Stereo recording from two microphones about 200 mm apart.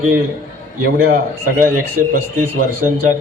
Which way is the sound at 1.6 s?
45° right (ahead or behind).